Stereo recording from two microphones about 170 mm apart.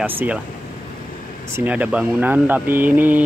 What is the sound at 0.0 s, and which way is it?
Speech, 10° right (ahead or behind).